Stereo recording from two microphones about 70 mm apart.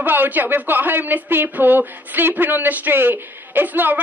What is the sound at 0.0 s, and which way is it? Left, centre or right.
Speech, right.